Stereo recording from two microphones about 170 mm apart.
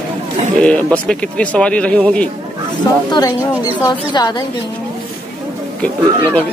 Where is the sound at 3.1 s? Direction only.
25° left (ahead or behind).